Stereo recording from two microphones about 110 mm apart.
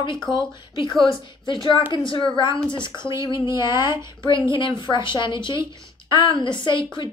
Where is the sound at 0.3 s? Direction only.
45° left (ahead or behind).